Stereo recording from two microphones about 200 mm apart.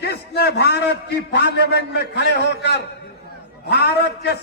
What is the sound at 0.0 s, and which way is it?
A man's voice, 55° left (ahead or behind).